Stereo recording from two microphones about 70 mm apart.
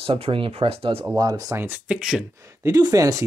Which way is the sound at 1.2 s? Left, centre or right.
Right.